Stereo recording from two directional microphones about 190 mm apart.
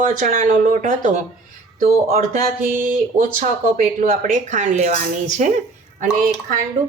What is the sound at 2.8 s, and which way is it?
Speech, 45° right (ahead or behind).